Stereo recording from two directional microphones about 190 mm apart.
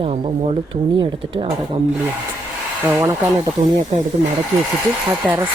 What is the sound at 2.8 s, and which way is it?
Speech, 10° right (ahead or behind).